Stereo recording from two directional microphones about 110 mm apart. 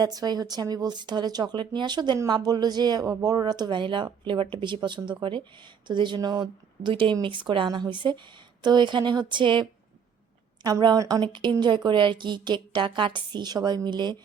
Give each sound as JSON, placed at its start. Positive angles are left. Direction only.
{"t": 0.0, "sound": "speech", "side_deg": -35}
{"t": 10.6, "sound": "speech", "side_deg": -35}
{"t": 11.2, "sound": "speech", "side_deg": -45}